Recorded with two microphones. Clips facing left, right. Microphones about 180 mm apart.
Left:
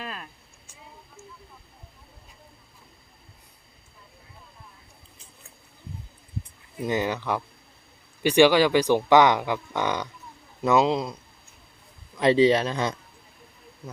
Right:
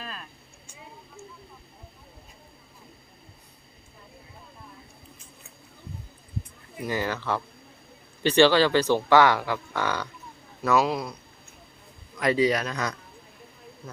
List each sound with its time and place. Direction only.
6.8 s speech: 20° left (ahead or behind)